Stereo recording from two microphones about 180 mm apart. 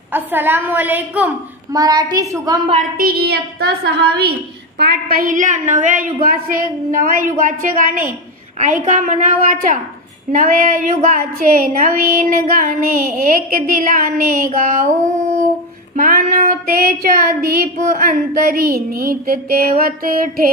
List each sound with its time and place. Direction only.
0.1 s a woman's voice: 10° right (ahead or behind)
1.8 s a woman's voice: 20° right (ahead or behind)
3.0 s a woman's voice: 60° right (ahead or behind)
4.7 s child singing: 55° right (ahead or behind)
16.0 s child singing: 50° right (ahead or behind)